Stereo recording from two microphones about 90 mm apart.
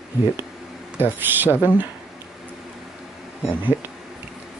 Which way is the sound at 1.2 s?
25° right (ahead or behind).